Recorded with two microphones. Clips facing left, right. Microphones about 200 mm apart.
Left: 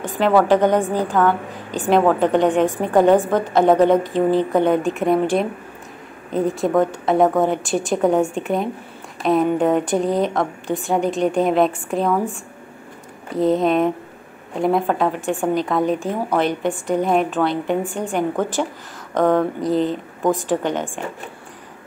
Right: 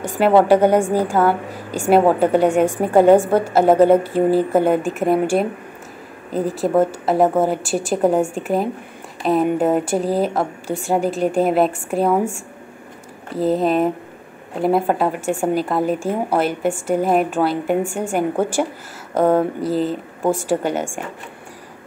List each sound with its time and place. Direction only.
0.0 s a sound: 10° right (ahead or behind)
0.5 s a woman's voice: 10° right (ahead or behind)
13.3 s a woman's voice: centre (ahead or behind)